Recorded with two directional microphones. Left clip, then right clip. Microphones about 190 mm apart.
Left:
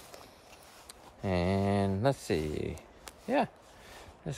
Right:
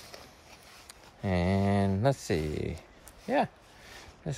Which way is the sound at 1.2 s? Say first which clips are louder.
Right 1 dB; 20° left (ahead or behind).